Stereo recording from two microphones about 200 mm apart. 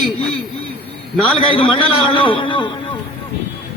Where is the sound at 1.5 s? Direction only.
25° left (ahead or behind).